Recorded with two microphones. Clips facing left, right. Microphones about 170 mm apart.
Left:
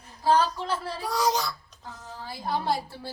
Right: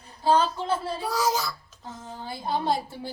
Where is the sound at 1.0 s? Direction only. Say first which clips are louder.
Left 4 dB; centre (ahead or behind).